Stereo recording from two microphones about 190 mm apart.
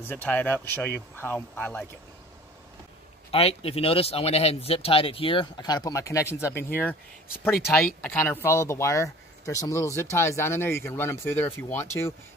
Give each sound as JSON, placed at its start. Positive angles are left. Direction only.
{"t": 0.1, "sound": "speech", "side_deg": 10}
{"t": 3.3, "sound": "speech", "side_deg": 30}